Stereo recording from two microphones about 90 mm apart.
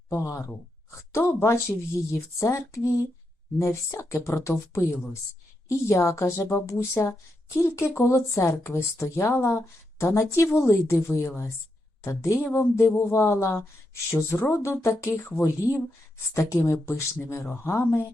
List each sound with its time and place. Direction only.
0.1 s speech: 30° left (ahead or behind)